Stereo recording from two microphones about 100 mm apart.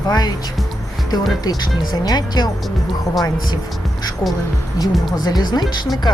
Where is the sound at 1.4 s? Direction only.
40° left (ahead or behind).